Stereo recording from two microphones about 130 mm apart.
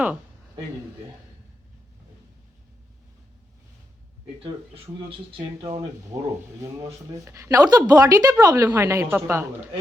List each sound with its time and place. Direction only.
4.7 s speech: 45° right (ahead or behind)
6.6 s speech: 25° right (ahead or behind)